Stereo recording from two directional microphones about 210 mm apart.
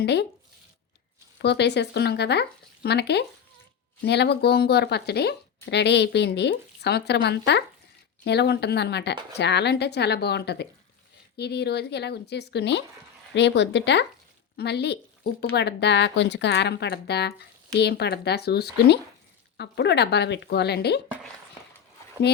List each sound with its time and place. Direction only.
0.0 s speech: 55° left (ahead or behind)
1.4 s speech: 55° left (ahead or behind)